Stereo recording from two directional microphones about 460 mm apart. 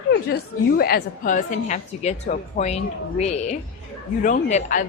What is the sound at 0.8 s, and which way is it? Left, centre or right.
A woman's voice, centre.